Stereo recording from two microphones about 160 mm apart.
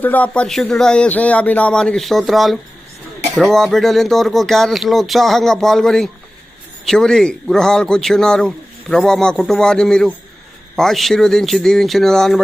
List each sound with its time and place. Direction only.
0.0 s speech: 10° left (ahead or behind)